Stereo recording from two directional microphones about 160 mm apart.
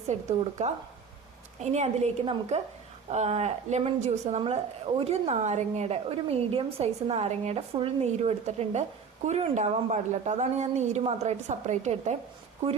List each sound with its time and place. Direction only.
0.1 s a woman's voice: 45° right (ahead or behind)